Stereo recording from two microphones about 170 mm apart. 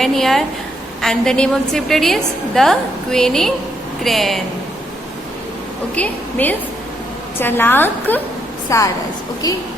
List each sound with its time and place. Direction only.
0.0 s a woman's voice: centre (ahead or behind)
6.0 s a woman's voice: 10° left (ahead or behind)